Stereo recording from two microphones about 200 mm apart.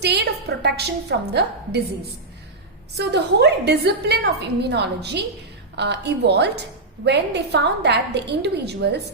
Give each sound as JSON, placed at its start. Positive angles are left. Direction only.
{"t": 0.0, "sound": "a woman's voice", "side_deg": -55}
{"t": 3.0, "sound": "a woman's voice", "side_deg": -55}